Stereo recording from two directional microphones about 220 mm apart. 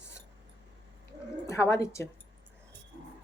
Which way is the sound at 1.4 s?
15° left (ahead or behind).